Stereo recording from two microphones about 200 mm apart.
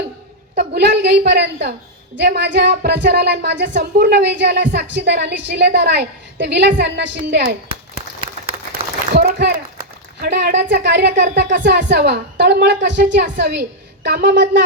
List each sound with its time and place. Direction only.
0.5 s speech: 55° right (ahead or behind)
9.1 s a sound: 55° right (ahead or behind)
10.2 s speech: 55° right (ahead or behind)